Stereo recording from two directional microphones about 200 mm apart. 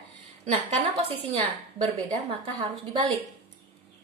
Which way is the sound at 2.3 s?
30° right (ahead or behind).